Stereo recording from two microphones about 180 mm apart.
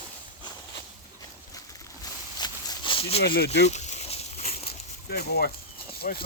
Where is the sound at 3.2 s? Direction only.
65° left (ahead or behind).